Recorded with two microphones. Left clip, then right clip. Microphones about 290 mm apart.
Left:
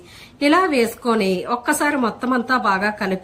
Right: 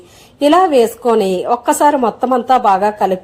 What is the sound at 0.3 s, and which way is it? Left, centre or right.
A woman's voice, centre.